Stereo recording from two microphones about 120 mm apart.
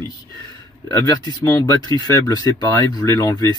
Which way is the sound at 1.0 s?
30° left (ahead or behind).